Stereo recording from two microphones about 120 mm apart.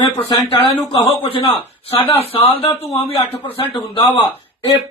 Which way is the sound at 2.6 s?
55° left (ahead or behind).